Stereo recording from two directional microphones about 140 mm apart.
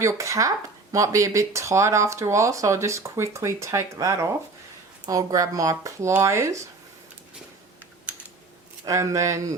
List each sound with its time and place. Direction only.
0.0 s speech: 25° right (ahead or behind)
8.8 s speech: 20° right (ahead or behind)